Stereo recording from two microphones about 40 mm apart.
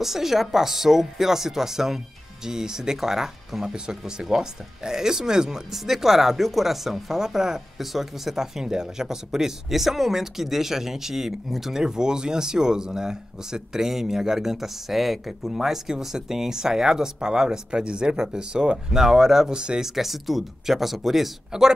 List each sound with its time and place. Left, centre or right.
0.0 s speech: centre; by 19.8 s right
19.8 s speech: centre